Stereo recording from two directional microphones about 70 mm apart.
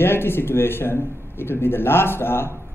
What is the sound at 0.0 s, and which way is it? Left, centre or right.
Speech, left.